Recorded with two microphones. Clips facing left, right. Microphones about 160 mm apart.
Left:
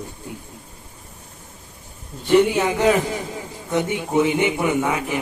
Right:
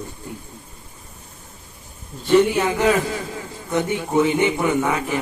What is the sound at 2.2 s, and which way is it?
A man's voice, 15° left (ahead or behind).